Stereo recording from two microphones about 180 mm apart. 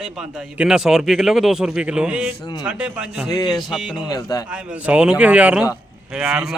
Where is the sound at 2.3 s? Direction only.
25° left (ahead or behind).